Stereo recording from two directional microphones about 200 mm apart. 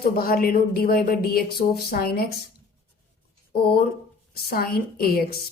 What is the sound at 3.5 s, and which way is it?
Speech, 50° left (ahead or behind).